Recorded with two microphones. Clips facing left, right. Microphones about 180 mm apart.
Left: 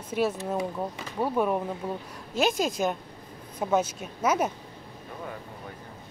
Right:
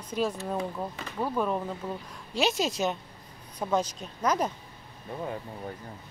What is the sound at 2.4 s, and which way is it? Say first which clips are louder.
Speech: left 2 dB; 50° left (ahead or behind).